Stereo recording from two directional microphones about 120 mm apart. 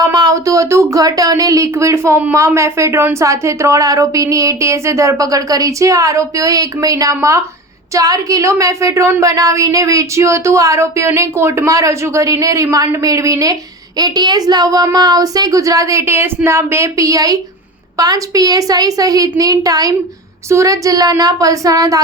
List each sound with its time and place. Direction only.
0.0 s a woman's voice: 30° right (ahead or behind)